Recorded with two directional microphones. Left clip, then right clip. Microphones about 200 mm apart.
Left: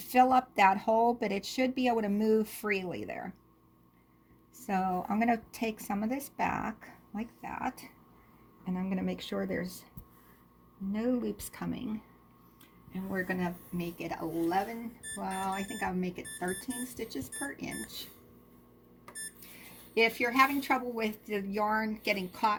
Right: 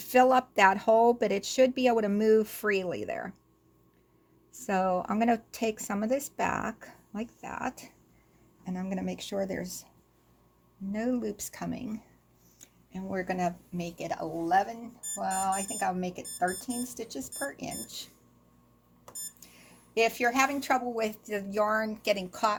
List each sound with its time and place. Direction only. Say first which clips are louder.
0.0 s speech: right 2 dB; 30° right (ahead or behind)
4.6 s speech: right 4 dB; 30° right (ahead or behind)
8.6 s speech: right 1 dB; 15° right (ahead or behind)
10.9 s speech: right 1 dB; 20° right (ahead or behind)
19.9 s speech: right 2 dB; 30° right (ahead or behind)